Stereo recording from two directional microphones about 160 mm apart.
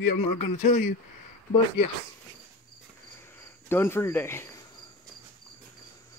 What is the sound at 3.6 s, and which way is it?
Cricket, 15° left (ahead or behind).